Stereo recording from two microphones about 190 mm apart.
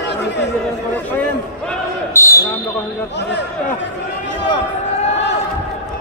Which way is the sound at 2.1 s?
15° left (ahead or behind).